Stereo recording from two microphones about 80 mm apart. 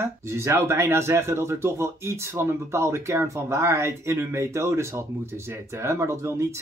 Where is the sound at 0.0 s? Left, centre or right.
Right.